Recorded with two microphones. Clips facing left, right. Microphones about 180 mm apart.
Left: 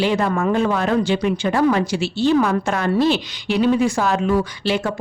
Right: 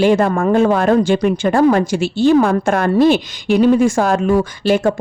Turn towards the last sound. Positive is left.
turn(degrees=-45)  # may be behind; listen again after turning